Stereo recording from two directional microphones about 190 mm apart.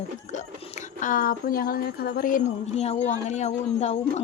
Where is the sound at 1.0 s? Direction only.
45° left (ahead or behind).